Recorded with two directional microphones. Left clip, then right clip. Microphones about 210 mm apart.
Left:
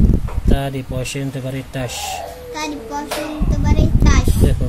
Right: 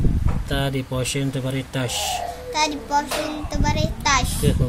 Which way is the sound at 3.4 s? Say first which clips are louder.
Left 1 dB; 55° right (ahead or behind).